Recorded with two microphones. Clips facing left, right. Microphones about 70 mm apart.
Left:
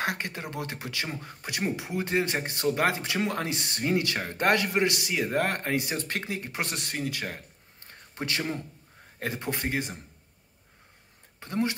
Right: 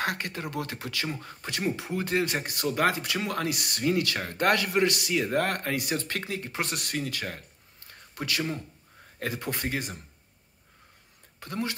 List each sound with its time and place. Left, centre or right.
0.0 s speech: left
11.3 s speech: left